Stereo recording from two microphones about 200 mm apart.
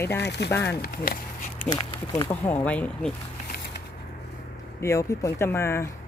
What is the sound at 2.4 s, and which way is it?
Speech, 10° left (ahead or behind).